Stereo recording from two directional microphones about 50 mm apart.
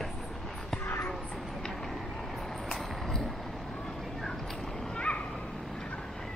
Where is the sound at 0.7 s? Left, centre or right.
Left.